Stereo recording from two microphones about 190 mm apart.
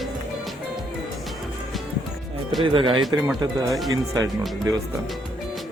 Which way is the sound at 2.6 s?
25° right (ahead or behind).